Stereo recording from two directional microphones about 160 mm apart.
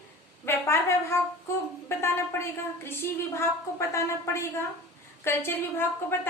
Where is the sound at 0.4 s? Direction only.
15° left (ahead or behind).